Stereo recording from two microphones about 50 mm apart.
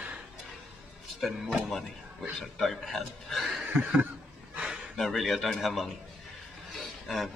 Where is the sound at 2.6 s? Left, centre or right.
Centre.